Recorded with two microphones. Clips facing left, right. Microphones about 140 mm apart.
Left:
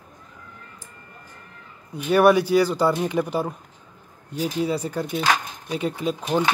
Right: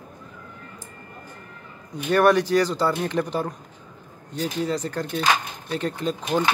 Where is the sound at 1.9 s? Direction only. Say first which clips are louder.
Left 2 dB; 10° left (ahead or behind).